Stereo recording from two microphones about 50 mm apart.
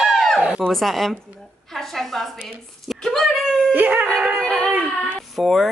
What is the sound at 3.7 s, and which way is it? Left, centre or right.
Howl, right.